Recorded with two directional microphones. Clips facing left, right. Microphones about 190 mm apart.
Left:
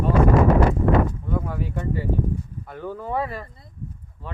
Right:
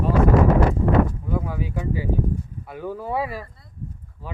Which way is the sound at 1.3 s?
5° right (ahead or behind).